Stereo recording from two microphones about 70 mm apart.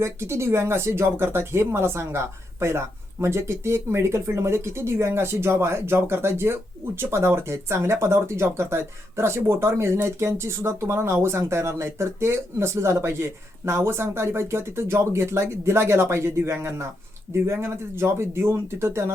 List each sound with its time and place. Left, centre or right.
0.0 s speech: right